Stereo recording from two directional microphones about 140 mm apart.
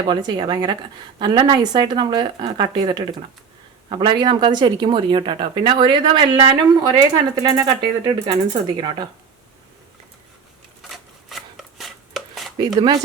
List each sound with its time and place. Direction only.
0.1 s a woman's voice: 30° right (ahead or behind)
10.9 s chopping: centre (ahead or behind)
12.5 s a woman's voice: 35° right (ahead or behind)